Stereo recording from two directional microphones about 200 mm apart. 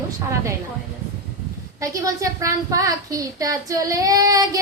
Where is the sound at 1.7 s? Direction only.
15° right (ahead or behind).